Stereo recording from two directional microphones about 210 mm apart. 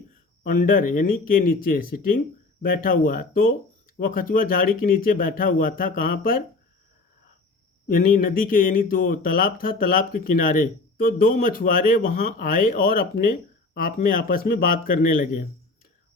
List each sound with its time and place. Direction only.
0.4 s speech: 40° left (ahead or behind)
7.9 s speech: 40° left (ahead or behind)